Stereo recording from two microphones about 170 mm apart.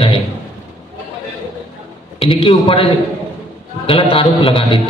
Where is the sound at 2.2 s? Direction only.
30° left (ahead or behind).